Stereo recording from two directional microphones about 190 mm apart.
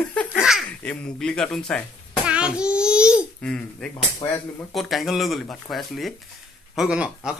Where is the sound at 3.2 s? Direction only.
5° left (ahead or behind).